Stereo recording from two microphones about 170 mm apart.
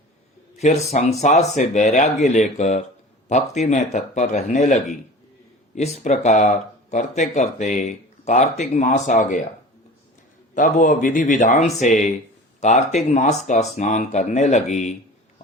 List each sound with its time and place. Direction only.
0.5 s speech: 40° left (ahead or behind)
5.7 s speech: 45° left (ahead or behind)
10.5 s speech: 50° left (ahead or behind)